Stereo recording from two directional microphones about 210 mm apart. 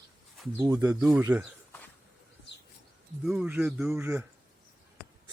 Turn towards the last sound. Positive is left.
turn(degrees=-10)  # may be behind; listen again after turning